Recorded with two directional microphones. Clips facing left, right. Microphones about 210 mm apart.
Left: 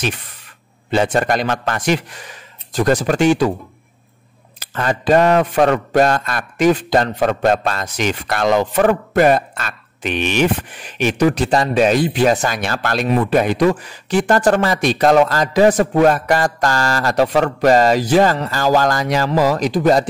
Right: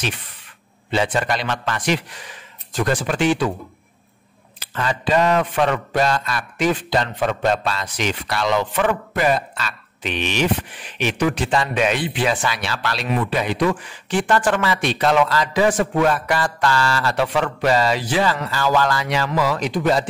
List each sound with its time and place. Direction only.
0.9 s a man's voice: 45° left (ahead or behind)
4.6 s a man's voice: 45° left (ahead or behind)